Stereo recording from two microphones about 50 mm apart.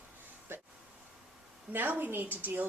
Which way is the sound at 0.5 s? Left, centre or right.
Right.